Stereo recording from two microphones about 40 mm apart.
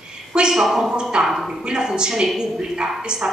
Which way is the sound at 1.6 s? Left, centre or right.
Centre.